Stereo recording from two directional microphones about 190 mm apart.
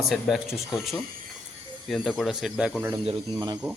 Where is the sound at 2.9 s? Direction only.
25° right (ahead or behind).